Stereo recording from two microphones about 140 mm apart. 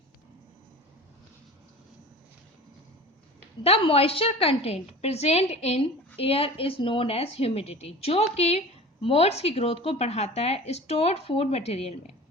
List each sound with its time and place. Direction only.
3.6 s a woman's voice: 45° left (ahead or behind)